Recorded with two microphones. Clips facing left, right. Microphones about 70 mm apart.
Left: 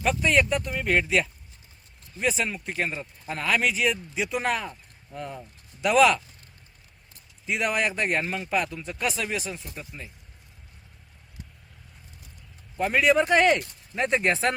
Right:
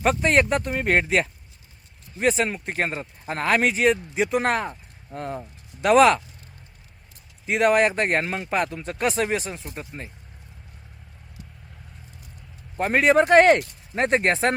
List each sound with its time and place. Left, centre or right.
0.0 s speech: right
7.4 s speech: right
12.7 s speech: right